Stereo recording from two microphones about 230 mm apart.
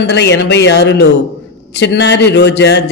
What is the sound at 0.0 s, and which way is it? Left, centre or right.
A man's voice, left.